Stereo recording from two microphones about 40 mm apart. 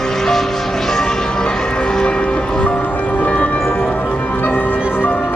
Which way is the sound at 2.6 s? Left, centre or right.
Left.